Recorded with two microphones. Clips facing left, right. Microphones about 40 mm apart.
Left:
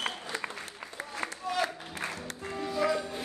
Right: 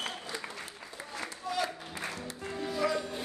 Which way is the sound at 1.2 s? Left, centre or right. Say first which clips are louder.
Left 2 dB; left.